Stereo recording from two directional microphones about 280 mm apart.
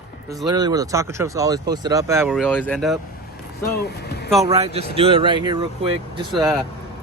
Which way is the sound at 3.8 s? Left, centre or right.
Left.